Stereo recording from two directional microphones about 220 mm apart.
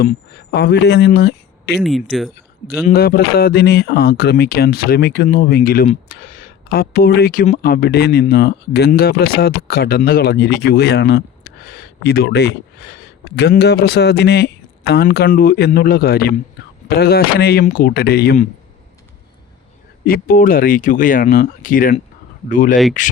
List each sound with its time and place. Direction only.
0.0 s speech: 45° left (ahead or behind)
1.8 s speech: centre (ahead or behind)
2.6 s speech: 45° left (ahead or behind)
20.1 s speech: 40° left (ahead or behind)